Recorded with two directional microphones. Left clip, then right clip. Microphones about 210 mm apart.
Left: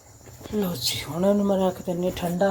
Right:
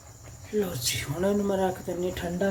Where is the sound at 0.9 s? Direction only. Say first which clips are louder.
Left 7 dB; 15° left (ahead or behind).